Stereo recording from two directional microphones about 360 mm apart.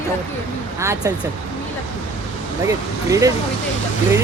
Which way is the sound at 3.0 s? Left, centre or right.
Centre.